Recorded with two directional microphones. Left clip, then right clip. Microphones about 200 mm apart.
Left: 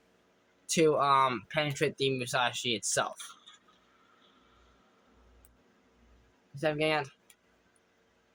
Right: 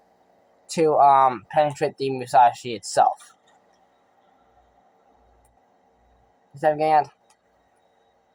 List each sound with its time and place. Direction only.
0.9 s speech: 25° left (ahead or behind)
6.7 s speech: 25° left (ahead or behind)